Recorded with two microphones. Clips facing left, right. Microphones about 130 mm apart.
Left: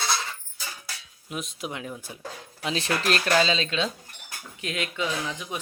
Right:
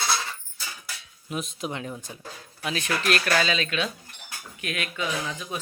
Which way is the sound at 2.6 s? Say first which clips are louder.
Left 1 dB; 30° left (ahead or behind).